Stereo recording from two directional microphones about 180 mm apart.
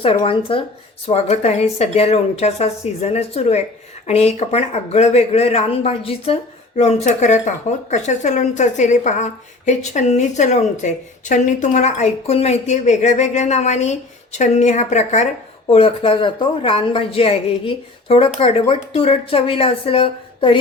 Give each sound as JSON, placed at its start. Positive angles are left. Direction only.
{"t": 0.0, "sound": "speech", "side_deg": 30}